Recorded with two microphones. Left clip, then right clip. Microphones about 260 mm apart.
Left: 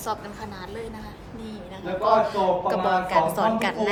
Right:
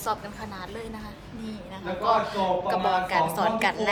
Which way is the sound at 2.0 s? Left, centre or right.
Centre.